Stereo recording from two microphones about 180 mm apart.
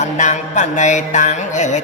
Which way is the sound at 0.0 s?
40° left (ahead or behind).